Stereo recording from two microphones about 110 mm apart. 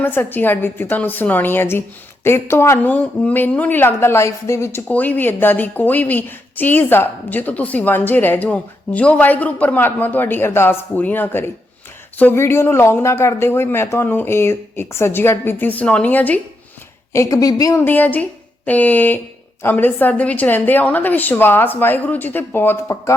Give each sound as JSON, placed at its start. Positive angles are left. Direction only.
{"t": 0.0, "sound": "a woman's voice", "side_deg": 15}
{"t": 4.9, "sound": "a woman's voice", "side_deg": 15}
{"t": 17.1, "sound": "a woman's voice", "side_deg": 30}
{"t": 17.7, "sound": "a woman's voice", "side_deg": 15}